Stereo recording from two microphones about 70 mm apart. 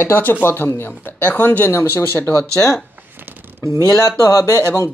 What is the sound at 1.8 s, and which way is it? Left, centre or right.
Speech, left.